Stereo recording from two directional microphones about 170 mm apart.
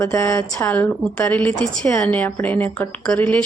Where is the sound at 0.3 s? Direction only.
5° left (ahead or behind).